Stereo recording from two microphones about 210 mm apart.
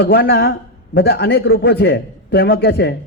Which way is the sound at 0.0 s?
55° left (ahead or behind).